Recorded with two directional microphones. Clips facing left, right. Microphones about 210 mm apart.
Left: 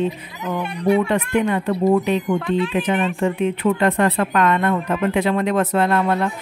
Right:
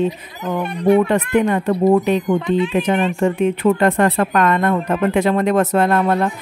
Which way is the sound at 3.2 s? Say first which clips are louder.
Right 3 dB; 45° right (ahead or behind).